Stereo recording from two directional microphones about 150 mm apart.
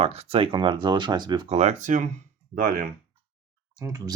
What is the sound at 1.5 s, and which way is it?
Speech, 45° right (ahead or behind).